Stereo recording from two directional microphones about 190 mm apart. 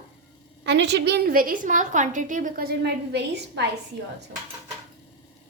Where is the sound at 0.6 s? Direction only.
65° right (ahead or behind).